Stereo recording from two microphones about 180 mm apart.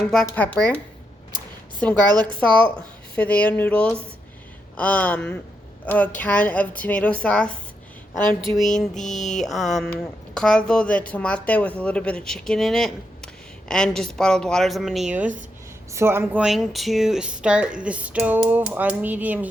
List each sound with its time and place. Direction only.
0.1 s a woman's voice: 5° left (ahead or behind)
2.2 s a woman's voice: 5° left (ahead or behind)
8.2 s speech: 25° right (ahead or behind)
8.4 s speech: centre (ahead or behind)